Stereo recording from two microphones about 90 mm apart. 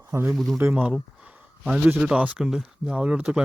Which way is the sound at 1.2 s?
10° right (ahead or behind).